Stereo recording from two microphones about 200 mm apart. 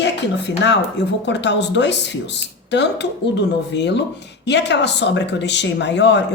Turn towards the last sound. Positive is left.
turn(degrees=60)  # may be behind; listen again after turning